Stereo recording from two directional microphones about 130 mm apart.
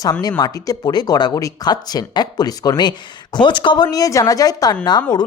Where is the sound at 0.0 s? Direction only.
30° left (ahead or behind).